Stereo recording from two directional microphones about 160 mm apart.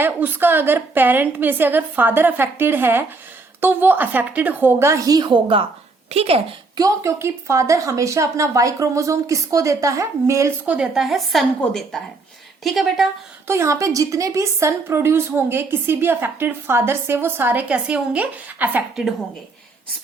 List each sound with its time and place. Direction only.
0.0 s a woman's voice: 10° right (ahead or behind); by 6.4 s 40° right (ahead or behind)
6.7 s speech: 20° right (ahead or behind)
10.8 s a woman's voice: 5° right (ahead or behind)
13.5 s a woman's voice: 20° right (ahead or behind)